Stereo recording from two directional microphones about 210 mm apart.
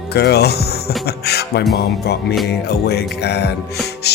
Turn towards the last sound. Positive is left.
turn(degrees=50)  # may be behind; listen again after turning